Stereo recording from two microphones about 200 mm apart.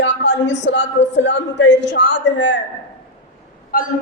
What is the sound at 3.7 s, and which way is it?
Speech, 45° left (ahead or behind).